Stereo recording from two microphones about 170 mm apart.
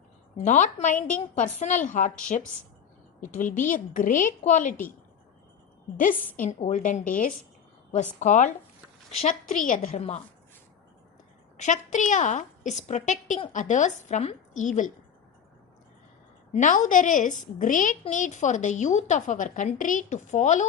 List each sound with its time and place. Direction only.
0.3 s a woman's voice: 45° left (ahead or behind)
6.3 s a woman's voice: 55° left (ahead or behind)
11.5 s a woman's voice: 45° left (ahead or behind)
16.5 s a woman's voice: 45° left (ahead or behind)